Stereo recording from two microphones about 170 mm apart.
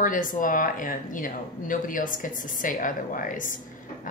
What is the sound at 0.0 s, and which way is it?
Speech, 50° left (ahead or behind).